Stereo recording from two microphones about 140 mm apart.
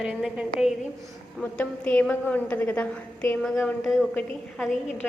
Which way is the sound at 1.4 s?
10° left (ahead or behind).